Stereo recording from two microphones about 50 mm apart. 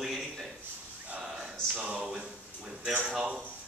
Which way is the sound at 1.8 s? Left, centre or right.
Right.